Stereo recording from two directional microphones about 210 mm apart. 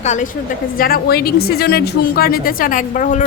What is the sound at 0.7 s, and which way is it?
A woman's voice, 45° left (ahead or behind).